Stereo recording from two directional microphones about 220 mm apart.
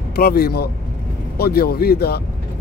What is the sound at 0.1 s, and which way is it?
Speech, 45° left (ahead or behind).